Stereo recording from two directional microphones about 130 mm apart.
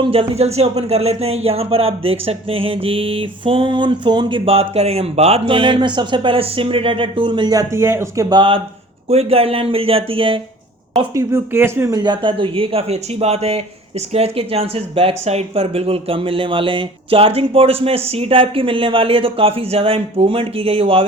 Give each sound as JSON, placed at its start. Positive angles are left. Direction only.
{"t": 0.0, "sound": "speech", "side_deg": -45}
{"t": 9.0, "sound": "speech", "side_deg": -50}
{"t": 11.1, "sound": "speech", "side_deg": -25}
{"t": 11.9, "sound": "speech", "side_deg": -35}